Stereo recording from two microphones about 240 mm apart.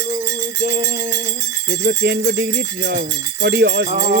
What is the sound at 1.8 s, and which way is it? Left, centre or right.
Speech, right.